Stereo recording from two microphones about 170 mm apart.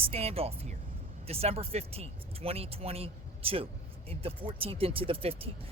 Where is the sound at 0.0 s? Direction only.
35° right (ahead or behind).